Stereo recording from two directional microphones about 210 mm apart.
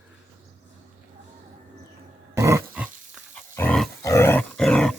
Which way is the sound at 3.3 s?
10° left (ahead or behind).